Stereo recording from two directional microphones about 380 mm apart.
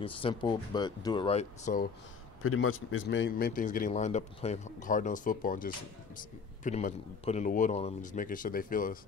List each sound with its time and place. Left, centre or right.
0.0 s speech: centre
2.4 s a man's voice: left